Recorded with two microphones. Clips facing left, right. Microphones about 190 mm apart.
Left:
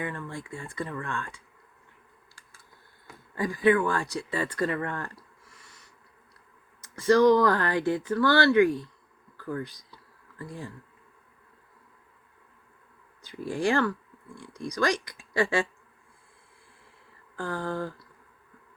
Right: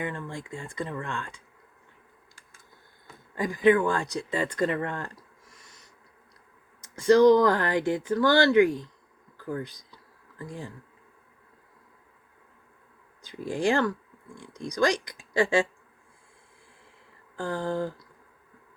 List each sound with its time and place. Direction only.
0.0 s speech: 20° right (ahead or behind)
3.3 s speech: 20° right (ahead or behind)
6.8 s speech: 20° right (ahead or behind)
13.2 s speech: 20° right (ahead or behind)
17.3 s speech: 15° right (ahead or behind)